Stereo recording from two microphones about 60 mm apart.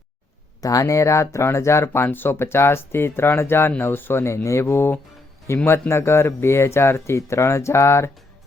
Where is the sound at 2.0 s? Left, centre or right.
Left.